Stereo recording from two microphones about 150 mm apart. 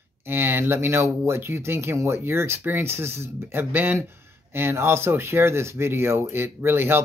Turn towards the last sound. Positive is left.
turn(degrees=-15)  # may be behind; listen again after turning